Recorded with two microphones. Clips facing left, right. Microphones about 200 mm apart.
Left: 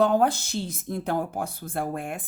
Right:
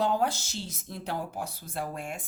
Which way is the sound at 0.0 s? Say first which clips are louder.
Left 6 dB; 55° left (ahead or behind).